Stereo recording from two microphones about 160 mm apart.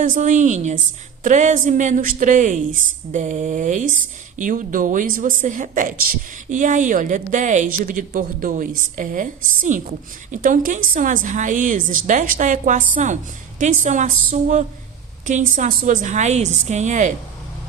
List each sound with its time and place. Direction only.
0.0 s a woman's voice: 55° right (ahead or behind)